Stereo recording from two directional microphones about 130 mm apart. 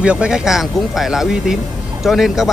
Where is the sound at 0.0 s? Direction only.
10° right (ahead or behind).